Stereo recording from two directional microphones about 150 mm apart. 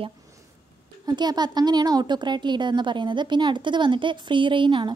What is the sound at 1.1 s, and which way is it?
Speech, 30° right (ahead or behind).